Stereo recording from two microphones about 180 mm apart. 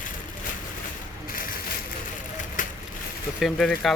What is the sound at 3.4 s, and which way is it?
Speech, centre (ahead or behind).